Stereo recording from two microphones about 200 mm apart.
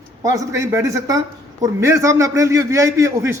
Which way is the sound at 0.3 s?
15° right (ahead or behind).